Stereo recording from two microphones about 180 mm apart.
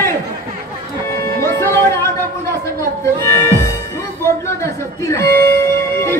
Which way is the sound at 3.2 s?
15° left (ahead or behind).